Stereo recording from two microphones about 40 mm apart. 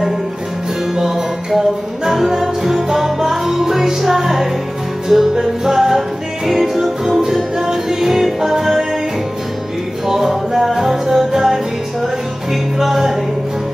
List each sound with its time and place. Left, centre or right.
0.9 s music: centre
10.0 s music: centre
12.7 s music: centre